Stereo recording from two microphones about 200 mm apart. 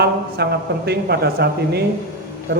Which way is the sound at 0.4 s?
55° right (ahead or behind).